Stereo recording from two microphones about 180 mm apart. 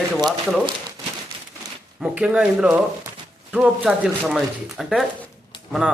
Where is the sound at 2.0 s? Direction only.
5° right (ahead or behind).